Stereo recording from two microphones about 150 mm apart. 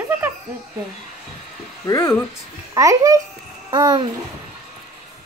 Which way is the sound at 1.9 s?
15° left (ahead or behind).